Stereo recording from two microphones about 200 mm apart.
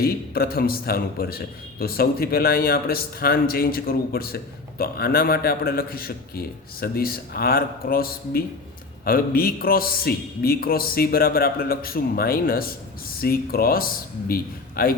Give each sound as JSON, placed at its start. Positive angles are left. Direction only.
{"t": 0.0, "sound": "a man's voice", "side_deg": 50}